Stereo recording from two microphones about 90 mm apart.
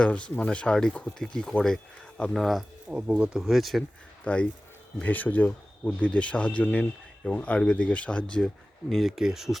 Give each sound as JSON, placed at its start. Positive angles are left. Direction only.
{"t": 0.0, "sound": "speech", "side_deg": 10}
{"t": 2.9, "sound": "speech", "side_deg": -15}
{"t": 4.2, "sound": "speech", "side_deg": 15}
{"t": 8.9, "sound": "speech", "side_deg": 0}